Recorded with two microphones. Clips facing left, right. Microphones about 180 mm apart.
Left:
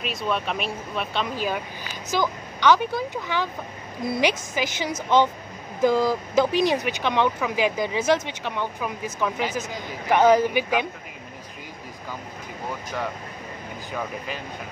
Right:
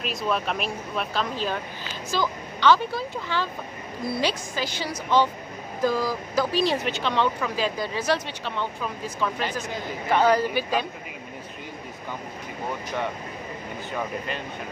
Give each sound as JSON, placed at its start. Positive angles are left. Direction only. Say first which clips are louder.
{"t": 0.0, "sound": "speech", "louder": "even", "side_deg": 0}
{"t": 1.3, "sound": "a woman's voice", "louder": "left 1 dB", "side_deg": 10}
{"t": 13.9, "sound": "speech", "louder": "right 1 dB", "side_deg": 5}